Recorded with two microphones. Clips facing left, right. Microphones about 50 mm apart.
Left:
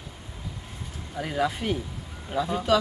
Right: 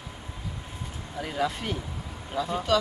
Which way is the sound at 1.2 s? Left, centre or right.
Centre.